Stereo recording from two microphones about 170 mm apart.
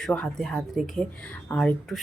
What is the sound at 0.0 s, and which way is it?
A woman's voice, 5° left (ahead or behind).